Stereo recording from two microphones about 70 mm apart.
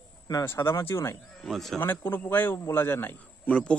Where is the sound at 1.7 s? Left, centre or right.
Left.